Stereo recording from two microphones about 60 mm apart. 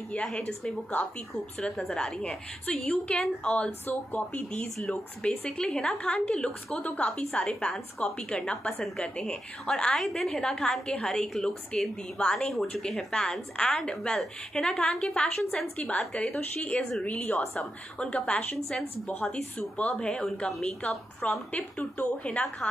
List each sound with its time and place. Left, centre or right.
0.1 s a woman's voice: centre
1.6 s a woman's voice: centre; by 5.5 s left
5.6 s a woman's voice: centre